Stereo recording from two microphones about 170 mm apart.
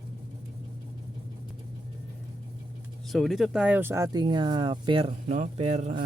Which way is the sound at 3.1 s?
Centre (ahead or behind).